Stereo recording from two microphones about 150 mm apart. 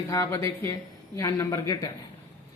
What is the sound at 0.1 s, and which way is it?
Speech, 20° left (ahead or behind).